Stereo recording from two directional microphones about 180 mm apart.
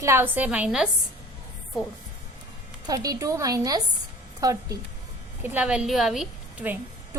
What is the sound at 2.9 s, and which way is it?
A woman's voice, 20° right (ahead or behind).